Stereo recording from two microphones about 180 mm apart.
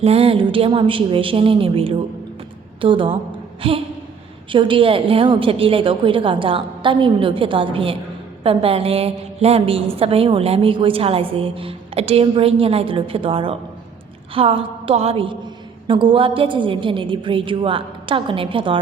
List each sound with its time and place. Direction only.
0.0 s a woman's voice: 30° right (ahead or behind)